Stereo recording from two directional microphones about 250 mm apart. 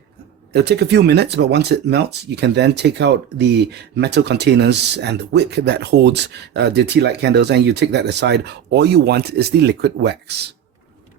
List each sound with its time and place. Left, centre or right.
0.5 s speech: right